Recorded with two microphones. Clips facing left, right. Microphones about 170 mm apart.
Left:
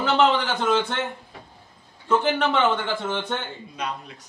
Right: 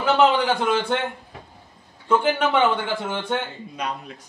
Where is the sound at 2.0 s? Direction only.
10° right (ahead or behind).